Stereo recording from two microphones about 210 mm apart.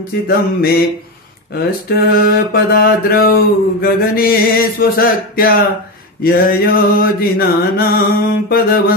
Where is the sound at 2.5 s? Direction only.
45° left (ahead or behind).